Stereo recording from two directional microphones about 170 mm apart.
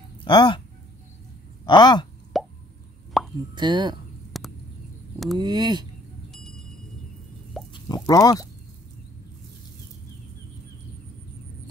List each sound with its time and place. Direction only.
0.2 s speech: 25° left (ahead or behind)
1.7 s speech: 25° left (ahead or behind)
2.3 s plop: centre (ahead or behind)
3.5 s speech: 25° right (ahead or behind)
4.3 s a sound: centre (ahead or behind)
5.4 s speech: 25° right (ahead or behind)
7.7 s speech: 20° left (ahead or behind)